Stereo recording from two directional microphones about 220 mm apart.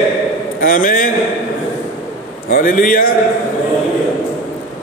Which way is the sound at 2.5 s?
35° left (ahead or behind).